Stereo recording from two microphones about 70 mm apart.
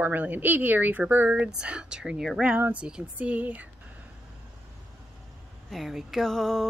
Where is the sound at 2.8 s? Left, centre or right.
Centre.